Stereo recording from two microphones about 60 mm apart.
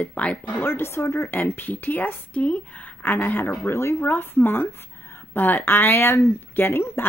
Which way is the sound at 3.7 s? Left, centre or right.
Left.